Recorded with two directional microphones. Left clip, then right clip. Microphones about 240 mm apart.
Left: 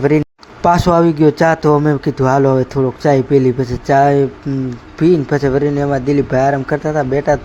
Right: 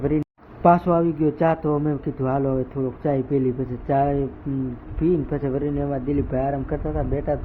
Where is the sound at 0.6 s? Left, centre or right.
Left.